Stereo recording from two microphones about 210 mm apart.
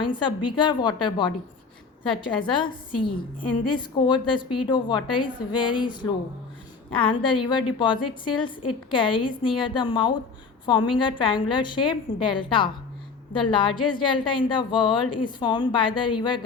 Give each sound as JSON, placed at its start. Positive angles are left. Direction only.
{"t": 0.0, "sound": "a woman's voice", "side_deg": 20}